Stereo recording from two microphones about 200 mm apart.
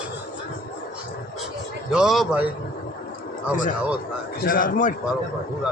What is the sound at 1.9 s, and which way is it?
Speech, centre (ahead or behind).